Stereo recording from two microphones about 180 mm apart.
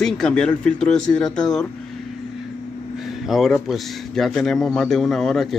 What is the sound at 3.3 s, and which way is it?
Speech, centre (ahead or behind).